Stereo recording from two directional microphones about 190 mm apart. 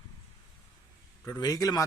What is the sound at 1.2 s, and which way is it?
Speech, 15° left (ahead or behind).